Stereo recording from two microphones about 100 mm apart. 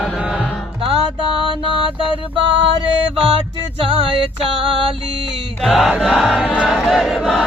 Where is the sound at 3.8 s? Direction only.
65° right (ahead or behind).